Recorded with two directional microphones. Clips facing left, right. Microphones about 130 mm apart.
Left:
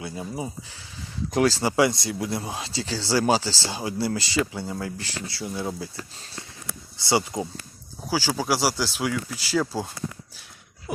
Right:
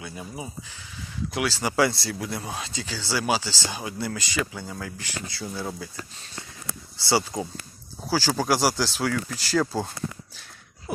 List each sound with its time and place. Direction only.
0.0 s speech: 25° left (ahead or behind)
1.3 s speech: 40° left (ahead or behind)
1.7 s speech: 20° left (ahead or behind); by 3.7 s 40° left (ahead or behind)
3.7 s speech: 25° left (ahead or behind)
7.0 s speech: 20° left (ahead or behind)
8.1 s speech: 10° left (ahead or behind)